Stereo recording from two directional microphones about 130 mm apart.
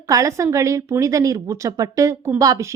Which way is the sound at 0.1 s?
25° right (ahead or behind).